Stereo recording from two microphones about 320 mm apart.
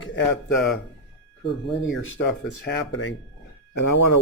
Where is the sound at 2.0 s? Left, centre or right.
Left.